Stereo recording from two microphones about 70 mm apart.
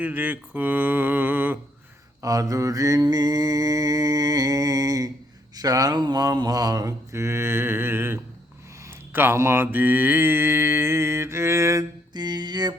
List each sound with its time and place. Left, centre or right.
0.0 s mantra: right
2.2 s mantra: right
3.1 s mantra: right
9.7 s mantra: right
12.1 s a sound: right